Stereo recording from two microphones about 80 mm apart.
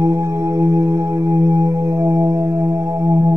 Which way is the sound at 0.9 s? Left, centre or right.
Right.